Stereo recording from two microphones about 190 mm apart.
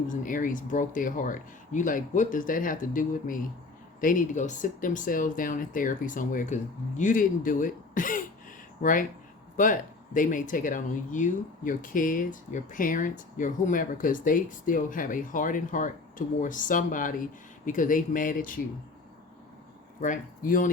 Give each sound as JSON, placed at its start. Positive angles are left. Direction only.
{"t": 0.1, "sound": "speech", "side_deg": 45}
{"t": 10.2, "sound": "speech", "side_deg": 45}
{"t": 20.0, "sound": "speech", "side_deg": 45}